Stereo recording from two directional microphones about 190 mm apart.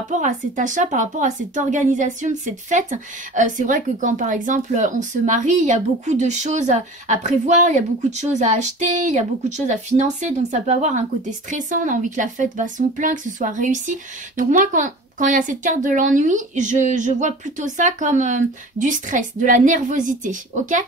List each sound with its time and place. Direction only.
0.1 s speech: 40° right (ahead or behind)